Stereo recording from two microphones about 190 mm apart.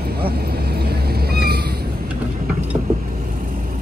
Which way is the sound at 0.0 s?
55° right (ahead or behind).